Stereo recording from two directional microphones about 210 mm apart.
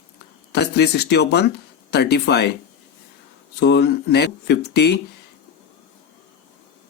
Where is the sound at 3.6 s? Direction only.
55° left (ahead or behind).